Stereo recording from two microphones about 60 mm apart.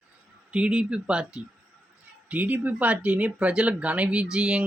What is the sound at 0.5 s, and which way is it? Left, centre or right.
Speech, centre.